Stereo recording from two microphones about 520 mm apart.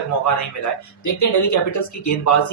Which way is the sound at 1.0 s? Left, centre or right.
Left.